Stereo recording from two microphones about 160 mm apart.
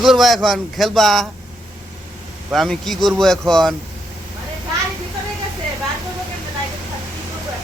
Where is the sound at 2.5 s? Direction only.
Centre (ahead or behind).